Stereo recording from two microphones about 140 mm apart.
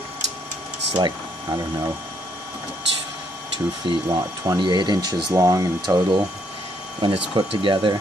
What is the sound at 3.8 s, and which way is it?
Speech, 25° right (ahead or behind).